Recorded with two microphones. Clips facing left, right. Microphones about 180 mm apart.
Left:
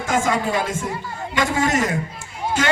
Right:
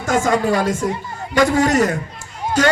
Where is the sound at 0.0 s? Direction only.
45° right (ahead or behind).